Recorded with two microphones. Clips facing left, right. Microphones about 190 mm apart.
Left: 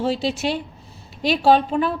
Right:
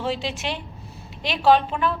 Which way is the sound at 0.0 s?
35° left (ahead or behind).